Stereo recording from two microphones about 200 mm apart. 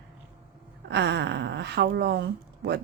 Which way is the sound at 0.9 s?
60° right (ahead or behind).